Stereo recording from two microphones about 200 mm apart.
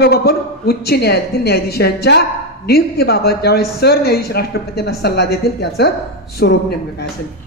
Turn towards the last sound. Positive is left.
turn(degrees=55)  # may be behind; listen again after turning